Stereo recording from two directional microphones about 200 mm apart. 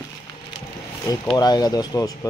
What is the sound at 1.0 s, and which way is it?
Speech, 20° left (ahead or behind).